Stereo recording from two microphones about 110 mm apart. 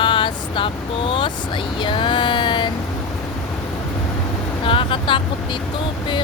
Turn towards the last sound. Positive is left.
turn(degrees=50)  # may be behind; listen again after turning